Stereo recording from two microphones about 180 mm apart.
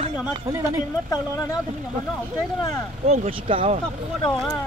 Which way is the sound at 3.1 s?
30° right (ahead or behind).